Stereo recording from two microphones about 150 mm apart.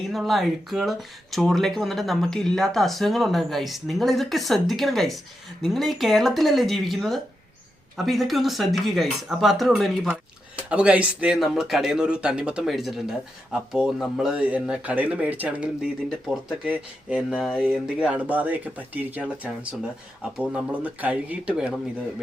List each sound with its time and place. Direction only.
0.1 s speech: centre (ahead or behind)